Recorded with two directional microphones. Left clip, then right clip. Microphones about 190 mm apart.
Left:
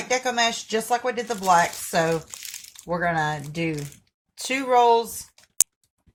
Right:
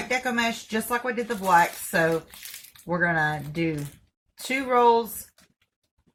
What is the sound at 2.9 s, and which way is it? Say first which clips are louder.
Speech: even; 40° left (ahead or behind).